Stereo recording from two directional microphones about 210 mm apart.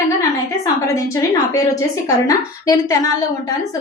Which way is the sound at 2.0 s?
15° left (ahead or behind).